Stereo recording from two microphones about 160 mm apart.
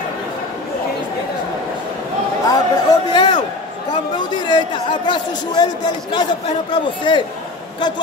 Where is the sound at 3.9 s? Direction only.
25° left (ahead or behind).